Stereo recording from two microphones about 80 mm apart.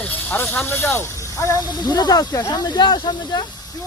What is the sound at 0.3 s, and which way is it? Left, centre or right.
Speech, left.